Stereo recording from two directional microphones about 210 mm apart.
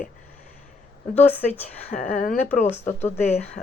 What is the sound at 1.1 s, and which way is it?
Speech, 35° left (ahead or behind).